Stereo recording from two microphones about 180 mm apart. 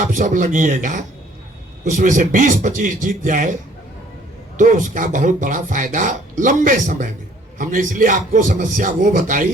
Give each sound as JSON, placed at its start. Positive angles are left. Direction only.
{"t": 0.0, "sound": "speech", "side_deg": -45}
{"t": 4.5, "sound": "speech", "side_deg": -45}